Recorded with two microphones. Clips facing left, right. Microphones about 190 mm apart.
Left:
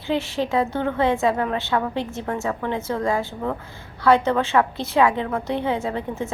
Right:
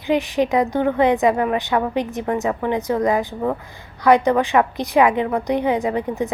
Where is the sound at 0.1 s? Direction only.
15° right (ahead or behind).